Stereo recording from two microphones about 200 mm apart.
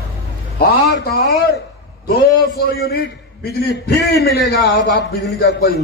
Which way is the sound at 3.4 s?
50° left (ahead or behind).